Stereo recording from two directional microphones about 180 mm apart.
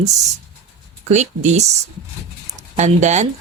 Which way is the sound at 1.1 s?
40° right (ahead or behind).